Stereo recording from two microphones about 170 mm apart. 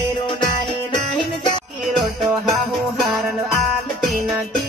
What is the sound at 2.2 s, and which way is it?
Music, centre (ahead or behind).